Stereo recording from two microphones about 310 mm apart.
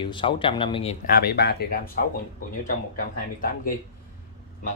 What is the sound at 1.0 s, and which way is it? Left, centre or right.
Speech, left.